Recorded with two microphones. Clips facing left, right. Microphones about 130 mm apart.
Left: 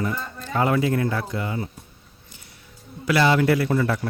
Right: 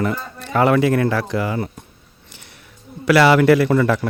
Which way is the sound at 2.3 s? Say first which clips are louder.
Right 5 dB; 80° right.